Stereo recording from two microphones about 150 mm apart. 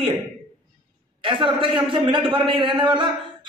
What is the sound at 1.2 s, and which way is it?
A man's voice, 35° right (ahead or behind).